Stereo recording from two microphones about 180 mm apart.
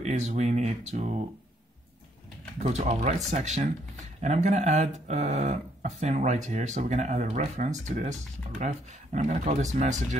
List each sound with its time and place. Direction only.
0.0 s speech: 40° right (ahead or behind)
2.6 s speech: 40° right (ahead or behind)